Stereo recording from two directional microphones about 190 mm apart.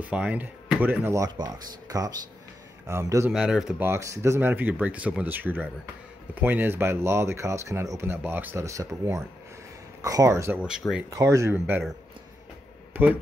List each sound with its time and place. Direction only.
0.0 s speech: 5° right (ahead or behind)
3.3 s speech: 5° right (ahead or behind)
12.9 s speech: 10° right (ahead or behind)